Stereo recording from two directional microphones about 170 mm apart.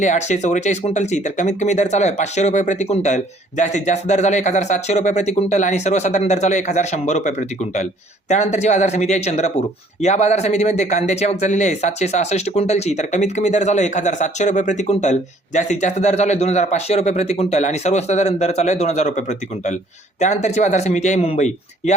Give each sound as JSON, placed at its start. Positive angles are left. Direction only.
{"t": 0.0, "sound": "speech", "side_deg": 45}